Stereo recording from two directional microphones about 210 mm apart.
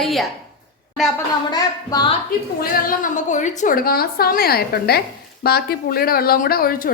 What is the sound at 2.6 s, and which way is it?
A woman's voice, 40° left (ahead or behind).